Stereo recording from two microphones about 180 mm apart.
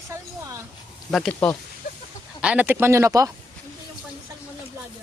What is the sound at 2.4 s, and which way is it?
Speech, 5° right (ahead or behind).